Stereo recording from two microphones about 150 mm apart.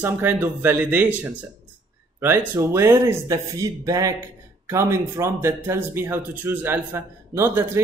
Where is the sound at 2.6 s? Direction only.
15° right (ahead or behind).